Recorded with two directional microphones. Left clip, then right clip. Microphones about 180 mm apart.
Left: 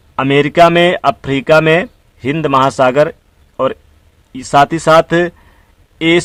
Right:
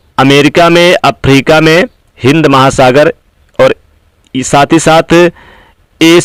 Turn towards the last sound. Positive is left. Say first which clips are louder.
# right 7 dB
turn(degrees=-40)  # may be behind; listen again after turning